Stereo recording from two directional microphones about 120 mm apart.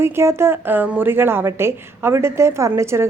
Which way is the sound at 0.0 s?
20° right (ahead or behind).